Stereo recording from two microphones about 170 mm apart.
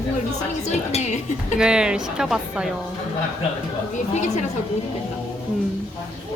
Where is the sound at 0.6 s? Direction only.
40° left (ahead or behind).